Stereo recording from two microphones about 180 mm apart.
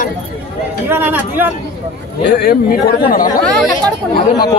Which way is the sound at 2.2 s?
65° left (ahead or behind).